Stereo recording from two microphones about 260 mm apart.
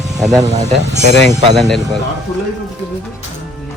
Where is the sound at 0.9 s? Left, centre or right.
Right.